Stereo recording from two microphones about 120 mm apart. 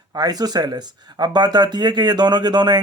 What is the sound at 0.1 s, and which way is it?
Speech, 35° right (ahead or behind).